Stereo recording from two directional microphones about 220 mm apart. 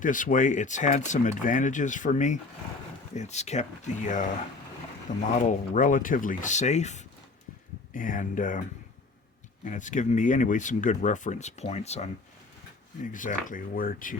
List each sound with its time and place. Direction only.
0.0 s speech: 35° left (ahead or behind)
9.6 s speech: 35° left (ahead or behind)